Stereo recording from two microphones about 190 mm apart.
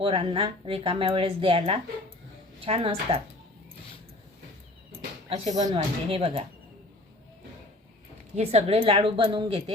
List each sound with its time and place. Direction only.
0.0 s speech: 25° right (ahead or behind)
5.5 s speech: 20° right (ahead or behind)
8.4 s speech: 30° right (ahead or behind)